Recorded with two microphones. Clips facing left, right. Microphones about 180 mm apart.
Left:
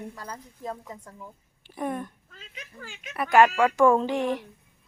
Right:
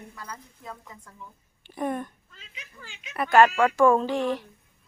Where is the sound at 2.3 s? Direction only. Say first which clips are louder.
Left 4 dB; 45° left (ahead or behind).